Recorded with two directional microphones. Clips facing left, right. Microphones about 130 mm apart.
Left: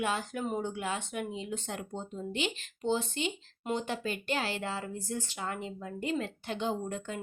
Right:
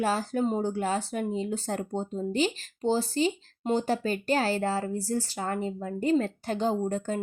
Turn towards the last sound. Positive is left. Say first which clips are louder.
# right 7 dB
turn(degrees=-40)  # may be behind; listen again after turning